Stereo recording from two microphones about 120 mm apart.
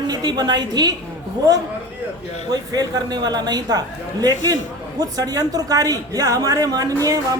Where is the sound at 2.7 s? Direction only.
35° right (ahead or behind).